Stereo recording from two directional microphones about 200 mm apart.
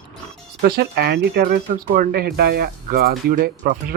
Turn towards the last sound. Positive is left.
turn(degrees=-45)  # may be behind; listen again after turning